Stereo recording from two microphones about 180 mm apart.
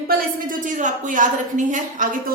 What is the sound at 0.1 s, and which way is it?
A woman's voice, 50° right (ahead or behind).